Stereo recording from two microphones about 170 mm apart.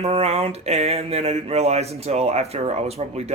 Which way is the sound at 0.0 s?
40° right (ahead or behind).